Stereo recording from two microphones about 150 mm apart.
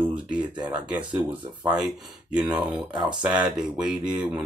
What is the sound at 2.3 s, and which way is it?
Speech, 10° right (ahead or behind).